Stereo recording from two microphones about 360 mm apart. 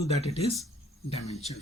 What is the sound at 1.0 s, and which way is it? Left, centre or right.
Speech, centre.